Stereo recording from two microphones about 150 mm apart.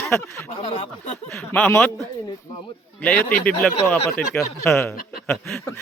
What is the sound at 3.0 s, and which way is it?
Speech, 10° left (ahead or behind).